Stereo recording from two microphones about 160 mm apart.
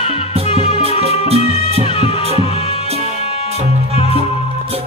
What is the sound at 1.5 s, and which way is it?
Music, 40° right (ahead or behind).